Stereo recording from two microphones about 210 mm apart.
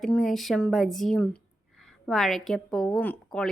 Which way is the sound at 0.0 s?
Centre (ahead or behind).